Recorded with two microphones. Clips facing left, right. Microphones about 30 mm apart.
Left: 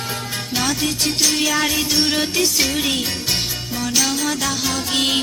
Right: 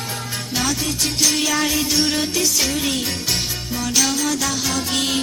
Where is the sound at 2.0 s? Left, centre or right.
Centre.